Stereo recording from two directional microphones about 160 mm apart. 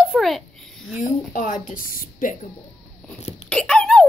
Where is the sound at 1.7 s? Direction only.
60° left (ahead or behind).